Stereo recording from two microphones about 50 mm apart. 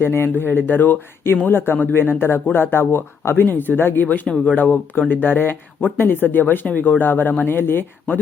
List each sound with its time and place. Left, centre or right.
0.0 s speech: left
4.0 s speech: left